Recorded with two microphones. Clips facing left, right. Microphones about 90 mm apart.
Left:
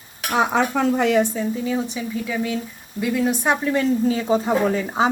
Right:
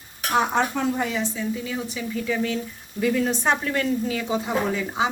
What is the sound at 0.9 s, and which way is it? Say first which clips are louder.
Speech: left 8 dB; 90° left.